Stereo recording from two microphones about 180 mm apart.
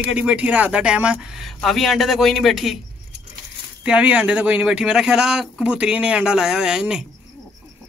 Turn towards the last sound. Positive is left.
turn(degrees=-5)  # may be behind; listen again after turning